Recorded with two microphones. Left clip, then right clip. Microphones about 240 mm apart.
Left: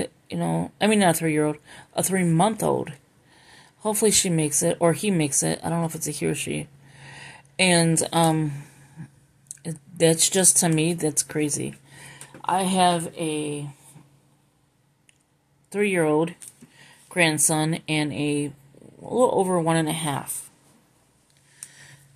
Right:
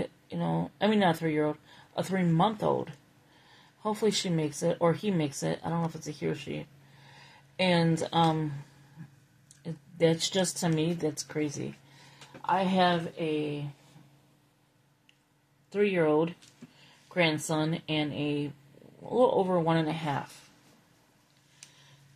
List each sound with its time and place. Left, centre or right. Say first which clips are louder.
0.0 s speech: left 6 dB; left
9.5 s speech: left 6 dB; left
15.7 s speech: left 4 dB; left